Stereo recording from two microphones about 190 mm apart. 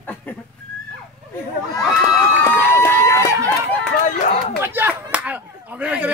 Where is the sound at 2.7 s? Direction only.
15° left (ahead or behind).